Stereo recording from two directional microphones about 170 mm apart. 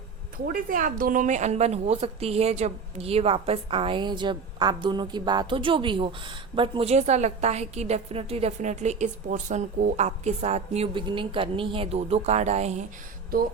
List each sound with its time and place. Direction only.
0.4 s a woman's voice: 55° right (ahead or behind)